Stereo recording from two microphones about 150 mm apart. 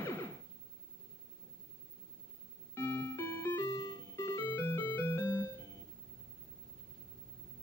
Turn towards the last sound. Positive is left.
turn(degrees=15)  # may be behind; listen again after turning